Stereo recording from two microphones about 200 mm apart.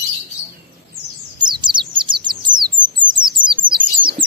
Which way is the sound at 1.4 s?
20° right (ahead or behind).